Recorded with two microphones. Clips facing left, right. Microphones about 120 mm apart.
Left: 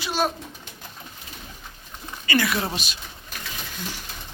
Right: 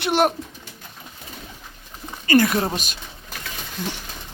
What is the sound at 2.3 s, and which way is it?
Speech, 45° right (ahead or behind).